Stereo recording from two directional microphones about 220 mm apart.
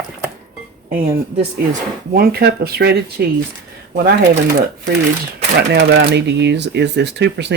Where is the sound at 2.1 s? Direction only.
45° right (ahead or behind).